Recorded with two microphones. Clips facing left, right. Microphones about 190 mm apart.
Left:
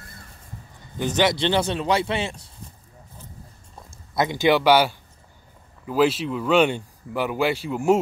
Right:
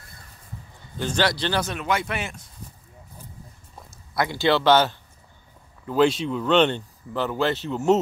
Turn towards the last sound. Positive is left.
turn(degrees=10)  # may be behind; listen again after turning